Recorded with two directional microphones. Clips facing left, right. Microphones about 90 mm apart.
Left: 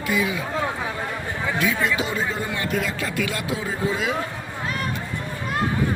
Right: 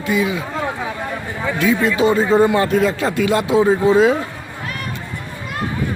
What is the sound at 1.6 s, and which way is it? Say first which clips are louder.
Speech: right 9 dB; 35° right (ahead or behind).